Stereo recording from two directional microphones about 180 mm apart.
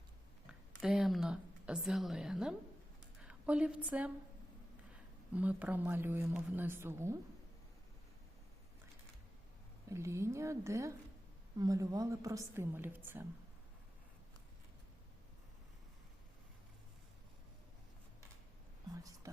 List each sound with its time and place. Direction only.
0.4 s a woman's voice: 5° right (ahead or behind)
5.3 s speech: 10° right (ahead or behind)
9.9 s speech: 15° right (ahead or behind)
19.2 s whispering: 20° right (ahead or behind)